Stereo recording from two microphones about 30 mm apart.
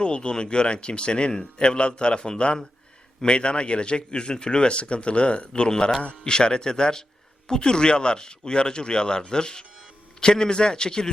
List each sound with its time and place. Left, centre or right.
0.0 s speech: left
5.6 s speech: left